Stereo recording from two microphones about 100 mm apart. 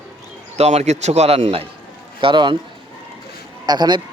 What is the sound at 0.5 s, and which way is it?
A man's voice, 90° right.